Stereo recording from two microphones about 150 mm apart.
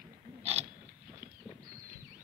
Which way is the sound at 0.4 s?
45° right (ahead or behind).